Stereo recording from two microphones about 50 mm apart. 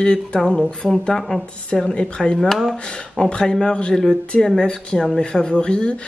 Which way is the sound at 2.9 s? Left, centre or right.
Centre.